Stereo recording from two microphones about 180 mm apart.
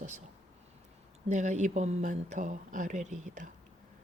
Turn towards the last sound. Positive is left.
turn(degrees=-40)  # may be behind; listen again after turning